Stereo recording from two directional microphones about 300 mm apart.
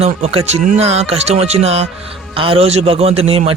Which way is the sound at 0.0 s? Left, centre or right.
Centre.